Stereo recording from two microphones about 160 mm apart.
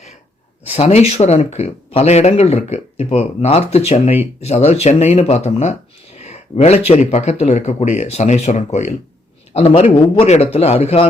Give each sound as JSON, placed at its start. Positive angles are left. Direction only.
{"t": 0.7, "sound": "a man's voice", "side_deg": 40}